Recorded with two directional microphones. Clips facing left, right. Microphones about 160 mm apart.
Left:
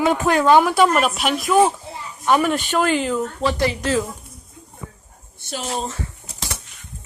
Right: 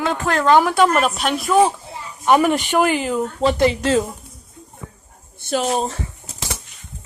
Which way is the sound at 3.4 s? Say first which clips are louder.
Right 8 dB; 20° right (ahead or behind).